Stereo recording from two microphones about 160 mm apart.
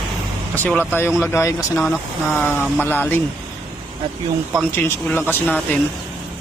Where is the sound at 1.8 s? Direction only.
Centre (ahead or behind).